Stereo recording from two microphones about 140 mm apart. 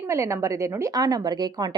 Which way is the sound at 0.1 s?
20° right (ahead or behind).